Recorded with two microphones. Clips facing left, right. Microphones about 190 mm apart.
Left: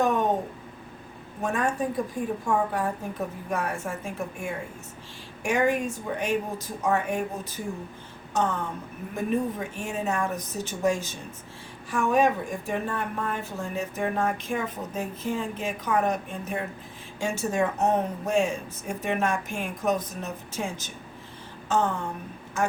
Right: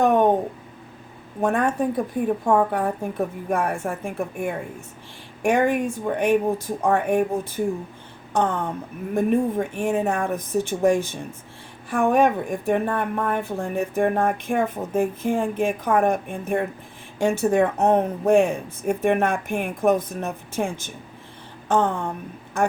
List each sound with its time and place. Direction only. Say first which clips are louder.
0.0 s speech: right 6 dB; 60° right (ahead or behind)
1.4 s a woman's voice: right 5 dB; 55° right (ahead or behind)